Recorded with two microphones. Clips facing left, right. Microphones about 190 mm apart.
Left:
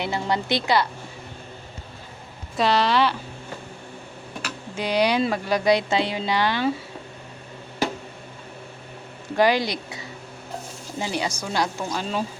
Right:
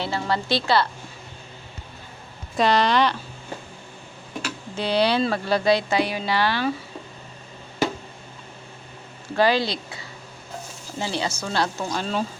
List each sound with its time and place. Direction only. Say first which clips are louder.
0.0 s speech: even; 20° left (ahead or behind)
2.6 s speech: right 1 dB; centre (ahead or behind)
4.8 s speech: even; 10° left (ahead or behind)
9.3 s a woman's voice: even; 15° left (ahead or behind)
11.0 s a woman's voice: even; 15° left (ahead or behind)